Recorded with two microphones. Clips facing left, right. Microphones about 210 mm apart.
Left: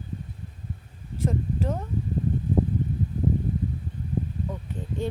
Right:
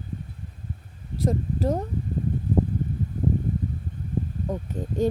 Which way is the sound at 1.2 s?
35° right (ahead or behind).